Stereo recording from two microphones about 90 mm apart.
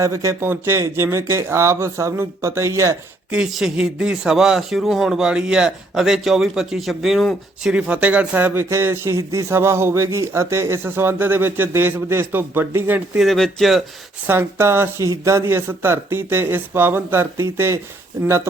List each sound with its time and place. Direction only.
0.0 s speech: 35° right (ahead or behind)
3.3 s speech: 5° right (ahead or behind)
7.7 s speech: 15° right (ahead or behind)
13.1 s speech: 5° left (ahead or behind)
14.3 s speech: 30° right (ahead or behind)